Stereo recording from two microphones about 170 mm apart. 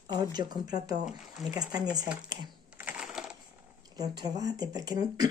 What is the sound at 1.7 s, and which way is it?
Speech, 20° right (ahead or behind).